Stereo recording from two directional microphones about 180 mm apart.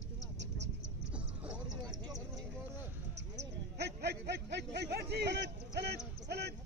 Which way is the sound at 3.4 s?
70° right (ahead or behind).